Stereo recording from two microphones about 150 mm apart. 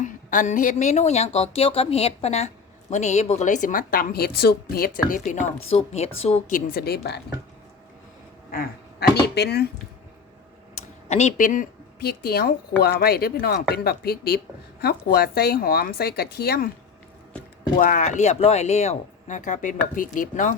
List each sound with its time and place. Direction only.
0.0 s a woman's voice: 60° left (ahead or behind); by 5.2 s 85° left
5.2 s a woman's voice: 55° left (ahead or behind)
6.5 s a woman's voice: 85° left
8.4 s speech: 80° left
11.1 s a woman's voice: 50° left (ahead or behind); by 16.7 s 80° left
17.7 s a woman's voice: 60° left (ahead or behind)